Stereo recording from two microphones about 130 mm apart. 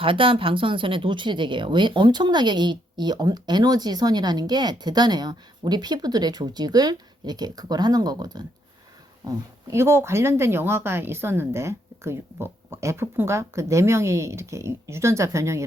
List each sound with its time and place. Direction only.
0.0 s speech: 40° right (ahead or behind); by 15.6 s 20° right (ahead or behind)